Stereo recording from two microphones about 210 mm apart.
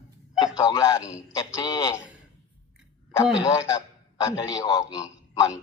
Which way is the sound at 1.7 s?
15° left (ahead or behind).